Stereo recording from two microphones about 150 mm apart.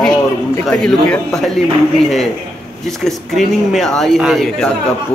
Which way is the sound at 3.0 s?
Centre (ahead or behind).